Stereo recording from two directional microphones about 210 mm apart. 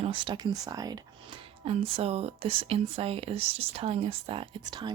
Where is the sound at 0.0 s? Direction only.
25° right (ahead or behind).